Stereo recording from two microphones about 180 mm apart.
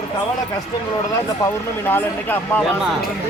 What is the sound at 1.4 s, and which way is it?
Speech, 10° left (ahead or behind).